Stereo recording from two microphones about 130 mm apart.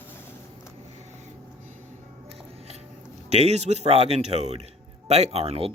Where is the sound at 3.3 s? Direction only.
55° right (ahead or behind).